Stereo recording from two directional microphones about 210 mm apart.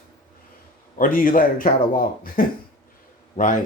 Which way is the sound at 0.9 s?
40° left (ahead or behind).